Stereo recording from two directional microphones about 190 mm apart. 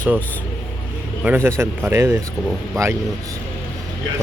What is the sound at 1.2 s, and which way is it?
Speech, 10° right (ahead or behind).